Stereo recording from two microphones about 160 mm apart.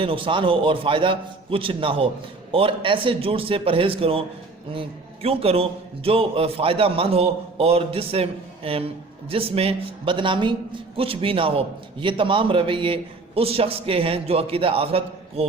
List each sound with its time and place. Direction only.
0.0 s a man's voice: 35° right (ahead or behind)